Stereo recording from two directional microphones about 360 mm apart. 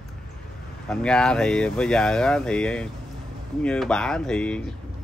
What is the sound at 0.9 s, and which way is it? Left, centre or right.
Speech, centre.